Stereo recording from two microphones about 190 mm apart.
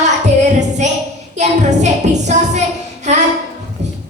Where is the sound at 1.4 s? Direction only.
40° right (ahead or behind).